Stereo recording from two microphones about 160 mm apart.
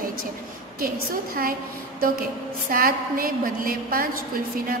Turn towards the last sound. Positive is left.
turn(degrees=-65)  # may be behind; listen again after turning